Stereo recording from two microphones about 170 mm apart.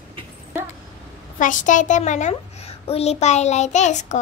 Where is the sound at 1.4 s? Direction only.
50° left (ahead or behind).